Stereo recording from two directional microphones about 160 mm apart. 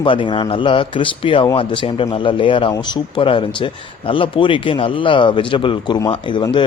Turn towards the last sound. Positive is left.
turn(degrees=30)  # may be behind; listen again after turning